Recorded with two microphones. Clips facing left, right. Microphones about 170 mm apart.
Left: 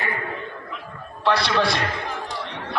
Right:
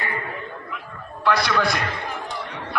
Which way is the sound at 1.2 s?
25° left (ahead or behind).